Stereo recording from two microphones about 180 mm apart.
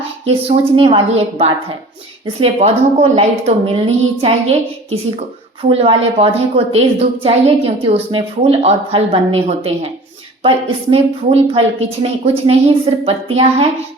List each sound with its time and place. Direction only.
0.3 s a woman's voice: 30° right (ahead or behind)
10.9 s a woman's voice: 35° right (ahead or behind)